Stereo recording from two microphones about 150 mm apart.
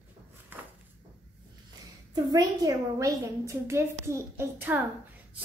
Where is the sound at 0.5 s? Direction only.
15° right (ahead or behind).